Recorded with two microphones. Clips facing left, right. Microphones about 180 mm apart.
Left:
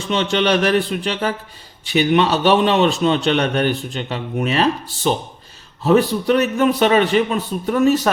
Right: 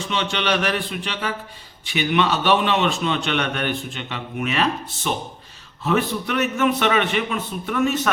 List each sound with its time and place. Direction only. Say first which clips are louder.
0.1 s a man's voice: left 7 dB; 40° left (ahead or behind)